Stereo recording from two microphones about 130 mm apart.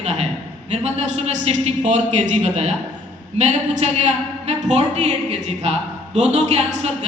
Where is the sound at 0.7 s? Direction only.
55° right (ahead or behind).